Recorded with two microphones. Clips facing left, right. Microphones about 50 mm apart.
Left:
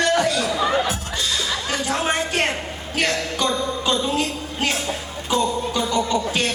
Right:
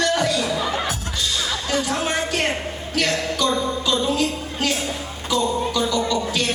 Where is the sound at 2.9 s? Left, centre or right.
Left.